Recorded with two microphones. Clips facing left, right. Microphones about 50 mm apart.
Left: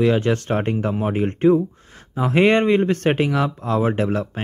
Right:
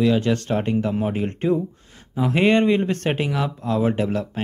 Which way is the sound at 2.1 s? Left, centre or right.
Left.